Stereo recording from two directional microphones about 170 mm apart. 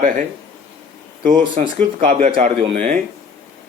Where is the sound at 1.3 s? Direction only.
50° right (ahead or behind).